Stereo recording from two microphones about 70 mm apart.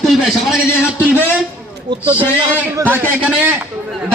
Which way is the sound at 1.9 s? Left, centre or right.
Right.